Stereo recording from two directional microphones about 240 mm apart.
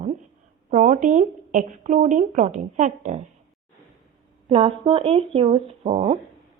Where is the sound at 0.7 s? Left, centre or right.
Right.